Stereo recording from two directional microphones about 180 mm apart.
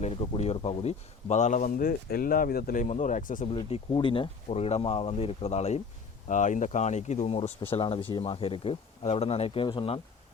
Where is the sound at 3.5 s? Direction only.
25° left (ahead or behind).